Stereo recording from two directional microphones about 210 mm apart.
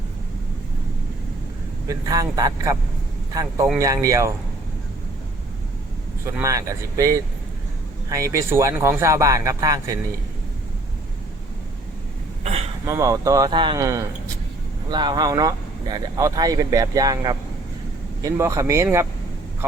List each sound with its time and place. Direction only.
1.9 s speech: 15° right (ahead or behind)
3.8 s speech: 15° right (ahead or behind)
6.2 s speech: 15° right (ahead or behind)
12.8 s speech: 15° right (ahead or behind)